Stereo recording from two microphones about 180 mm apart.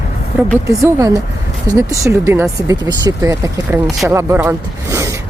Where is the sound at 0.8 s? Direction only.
15° right (ahead or behind).